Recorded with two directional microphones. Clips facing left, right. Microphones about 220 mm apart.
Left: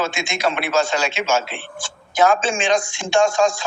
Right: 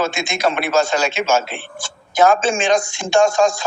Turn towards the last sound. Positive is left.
turn(degrees=-40)  # may be behind; listen again after turning